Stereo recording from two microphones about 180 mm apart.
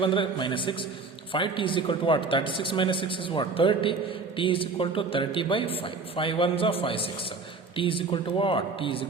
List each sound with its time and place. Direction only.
0.0 s a man's voice: 30° left (ahead or behind)